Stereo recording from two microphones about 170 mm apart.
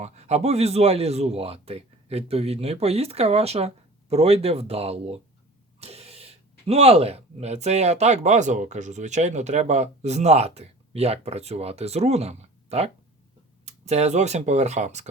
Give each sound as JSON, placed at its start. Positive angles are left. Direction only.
{"t": 0.0, "sound": "speech", "side_deg": -40}